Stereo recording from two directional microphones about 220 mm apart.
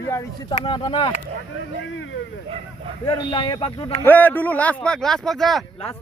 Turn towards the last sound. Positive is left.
turn(degrees=0)  # may be behind; listen again after turning